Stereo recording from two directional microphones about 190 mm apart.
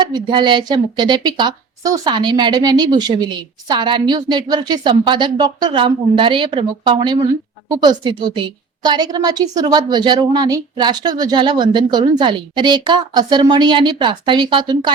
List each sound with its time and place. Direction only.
0.0 s a woman's voice: 25° right (ahead or behind)